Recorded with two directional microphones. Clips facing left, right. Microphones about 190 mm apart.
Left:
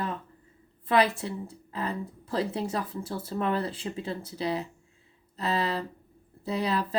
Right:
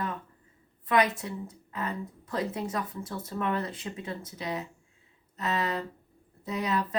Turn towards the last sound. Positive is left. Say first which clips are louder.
# left 2 dB
turn(degrees=30)  # may be behind; listen again after turning